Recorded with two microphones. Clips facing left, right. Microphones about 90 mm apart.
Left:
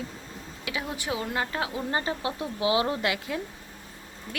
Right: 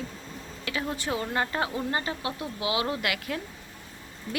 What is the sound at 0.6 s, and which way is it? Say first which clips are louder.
Speech: right 1 dB; 10° left (ahead or behind).